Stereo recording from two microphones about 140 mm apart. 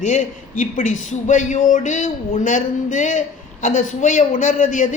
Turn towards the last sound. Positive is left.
turn(degrees=65)  # may be behind; listen again after turning